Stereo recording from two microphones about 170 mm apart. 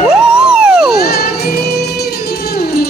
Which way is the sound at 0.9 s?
65° left (ahead or behind).